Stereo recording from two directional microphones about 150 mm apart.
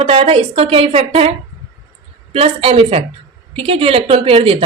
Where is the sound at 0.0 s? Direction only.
40° right (ahead or behind).